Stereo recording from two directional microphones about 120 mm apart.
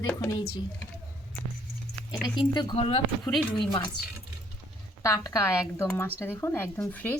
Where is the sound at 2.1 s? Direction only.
40° left (ahead or behind).